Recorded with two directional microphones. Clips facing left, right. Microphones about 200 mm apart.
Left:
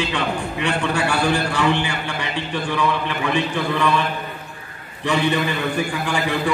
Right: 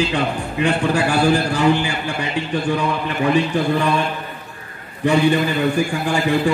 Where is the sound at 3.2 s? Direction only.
40° right (ahead or behind).